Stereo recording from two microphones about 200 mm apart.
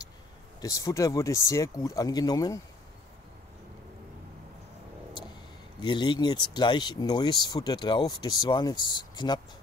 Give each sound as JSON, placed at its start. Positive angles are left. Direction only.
{"t": 0.6, "sound": "speech", "side_deg": 15}
{"t": 5.8, "sound": "speech", "side_deg": 20}